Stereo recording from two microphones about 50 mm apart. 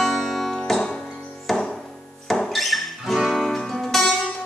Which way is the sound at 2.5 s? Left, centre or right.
Centre.